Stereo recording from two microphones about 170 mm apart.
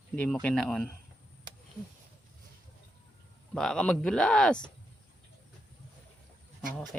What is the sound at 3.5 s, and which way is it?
Speech, 5° left (ahead or behind).